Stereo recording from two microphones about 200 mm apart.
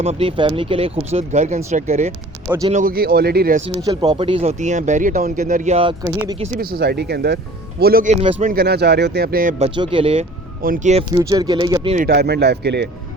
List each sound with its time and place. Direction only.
0.0 s speech: 30° right (ahead or behind)
2.7 s speech: 45° right (ahead or behind)
3.8 s speech: 20° right (ahead or behind)
6.6 s speech: 50° right (ahead or behind); by 8.4 s 30° right (ahead or behind)
8.4 s speech: 50° right (ahead or behind)
9.6 s speech: 25° right (ahead or behind)
10.6 s speech: 45° right (ahead or behind)
11.2 s speech: 20° right (ahead or behind)
11.9 s speech: 50° right (ahead or behind)